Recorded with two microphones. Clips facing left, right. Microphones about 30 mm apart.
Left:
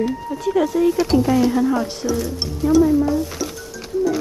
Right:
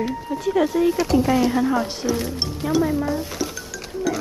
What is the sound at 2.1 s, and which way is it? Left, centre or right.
Speech, right.